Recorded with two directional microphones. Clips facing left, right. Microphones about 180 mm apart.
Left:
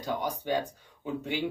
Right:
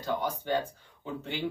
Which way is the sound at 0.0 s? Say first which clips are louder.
Even; 15° left (ahead or behind).